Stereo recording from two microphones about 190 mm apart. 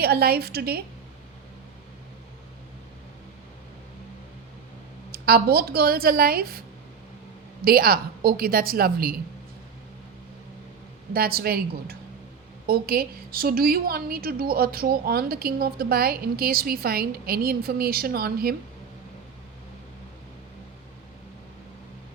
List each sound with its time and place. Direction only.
0.0 s a woman's voice: 55° right (ahead or behind)
5.1 s a woman's voice: 55° right (ahead or behind)
11.1 s a woman's voice: 55° right (ahead or behind)